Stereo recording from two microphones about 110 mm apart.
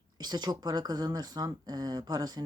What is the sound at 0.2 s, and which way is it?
Speech, 40° right (ahead or behind).